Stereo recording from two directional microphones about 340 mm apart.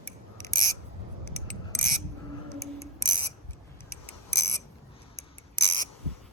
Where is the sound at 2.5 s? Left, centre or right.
Centre.